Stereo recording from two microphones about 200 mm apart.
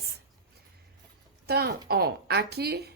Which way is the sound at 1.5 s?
50° right (ahead or behind).